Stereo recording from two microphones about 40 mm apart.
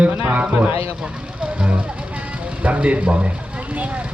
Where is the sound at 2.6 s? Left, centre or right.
Right.